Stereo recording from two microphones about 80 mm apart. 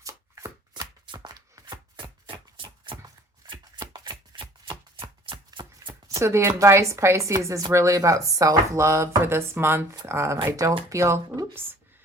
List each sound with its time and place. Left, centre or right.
0.0 s shuffling cards: right
1.0 s shuffling cards: right
1.6 s chopping: right
3.4 s shuffling cards: right
6.1 s speech: right